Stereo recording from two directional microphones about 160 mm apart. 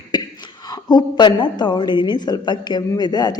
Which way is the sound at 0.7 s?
25° left (ahead or behind).